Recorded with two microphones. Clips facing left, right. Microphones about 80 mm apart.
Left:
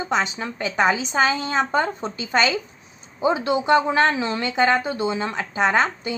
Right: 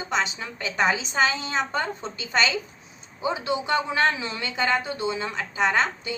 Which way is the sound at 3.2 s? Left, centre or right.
Left.